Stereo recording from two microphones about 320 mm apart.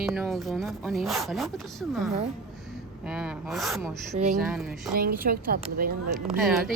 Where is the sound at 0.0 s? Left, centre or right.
Centre.